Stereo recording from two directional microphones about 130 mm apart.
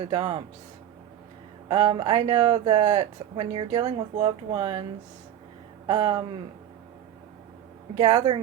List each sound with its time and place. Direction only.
0.0 s speech: 40° right (ahead or behind)
1.6 s speech: 45° right (ahead or behind)
2.8 s speech: 55° right (ahead or behind)
3.3 s speech: 45° right (ahead or behind)
5.9 s speech: 40° right (ahead or behind)
7.9 s speech: 45° right (ahead or behind)